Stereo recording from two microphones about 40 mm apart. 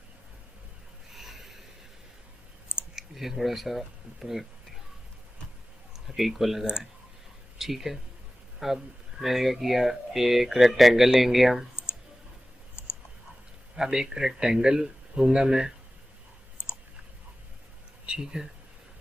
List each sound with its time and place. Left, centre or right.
1.1 s snort: centre
3.0 s speech: centre
5.9 s speech: centre
12.8 s clicking: left
13.7 s speech: centre
18.0 s speech: centre